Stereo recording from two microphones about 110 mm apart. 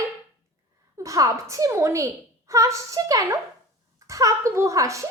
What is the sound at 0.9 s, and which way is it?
A woman's voice, 30° right (ahead or behind).